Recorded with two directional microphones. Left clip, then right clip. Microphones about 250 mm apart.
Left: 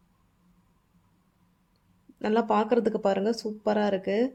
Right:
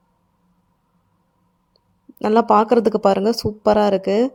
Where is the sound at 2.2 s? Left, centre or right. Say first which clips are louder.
Right 10 dB; right.